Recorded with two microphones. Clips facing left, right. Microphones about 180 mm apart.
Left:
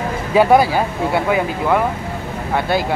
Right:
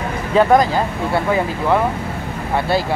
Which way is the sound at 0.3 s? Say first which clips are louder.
Left 1 dB; 10° left (ahead or behind).